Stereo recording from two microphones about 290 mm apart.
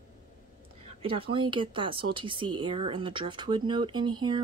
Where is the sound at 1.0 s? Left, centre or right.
Centre.